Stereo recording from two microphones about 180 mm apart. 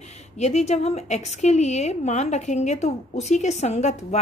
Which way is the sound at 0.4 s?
40° left (ahead or behind).